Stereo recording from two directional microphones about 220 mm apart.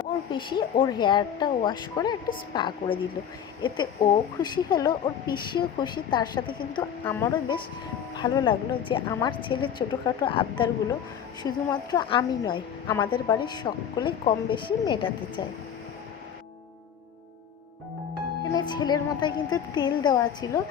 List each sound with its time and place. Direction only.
0.3 s a woman's voice: 20° left (ahead or behind)
7.0 s speech: 10° left (ahead or behind)
8.2 s a woman's voice: 20° left (ahead or behind)
18.5 s a woman's voice: 20° left (ahead or behind)